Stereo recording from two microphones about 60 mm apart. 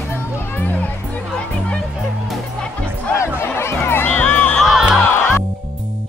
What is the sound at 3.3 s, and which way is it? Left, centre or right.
Music, left.